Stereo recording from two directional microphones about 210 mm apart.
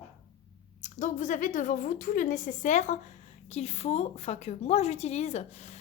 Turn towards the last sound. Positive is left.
turn(degrees=30)  # may be behind; listen again after turning